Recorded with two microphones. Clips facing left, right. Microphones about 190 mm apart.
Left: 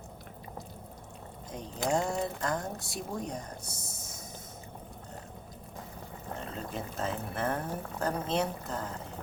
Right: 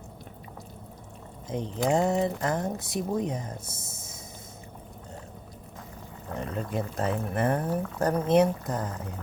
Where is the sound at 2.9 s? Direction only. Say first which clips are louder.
Right 9 dB; 20° right (ahead or behind).